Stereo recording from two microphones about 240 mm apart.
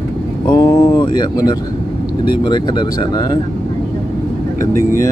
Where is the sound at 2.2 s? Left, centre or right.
Centre.